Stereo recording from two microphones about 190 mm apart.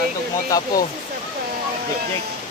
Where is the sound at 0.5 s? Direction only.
20° left (ahead or behind).